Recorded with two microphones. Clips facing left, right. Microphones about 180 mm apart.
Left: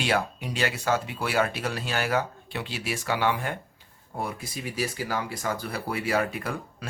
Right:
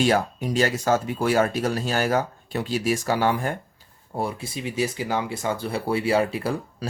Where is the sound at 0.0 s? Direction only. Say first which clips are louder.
Right 6 dB; 40° right (ahead or behind).